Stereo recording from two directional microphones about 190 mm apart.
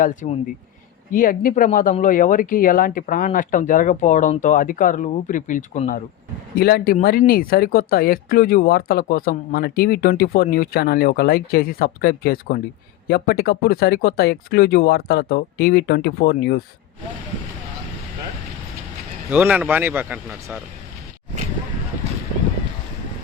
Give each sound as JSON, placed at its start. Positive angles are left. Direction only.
{"t": 0.0, "sound": "speech", "side_deg": 40}
{"t": 6.6, "sound": "speech", "side_deg": 55}
{"t": 19.3, "sound": "speech", "side_deg": -10}